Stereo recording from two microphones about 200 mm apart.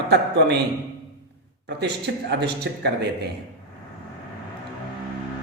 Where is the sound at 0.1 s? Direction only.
55° right (ahead or behind).